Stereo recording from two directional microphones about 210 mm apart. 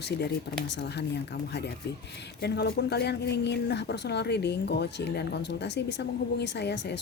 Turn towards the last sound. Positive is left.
turn(degrees=55)  # may be behind; listen again after turning